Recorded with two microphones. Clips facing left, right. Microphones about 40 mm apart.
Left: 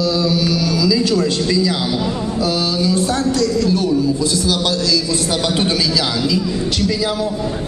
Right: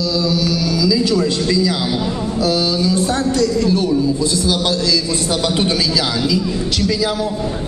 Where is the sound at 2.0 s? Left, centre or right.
Centre.